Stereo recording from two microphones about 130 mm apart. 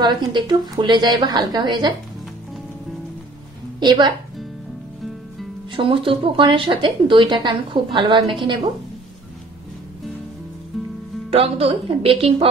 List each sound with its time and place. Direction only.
0.0 s speech: 35° right (ahead or behind)
3.8 s speech: 35° right (ahead or behind)
5.8 s speech: 40° right (ahead or behind)
11.2 s speech: 50° right (ahead or behind)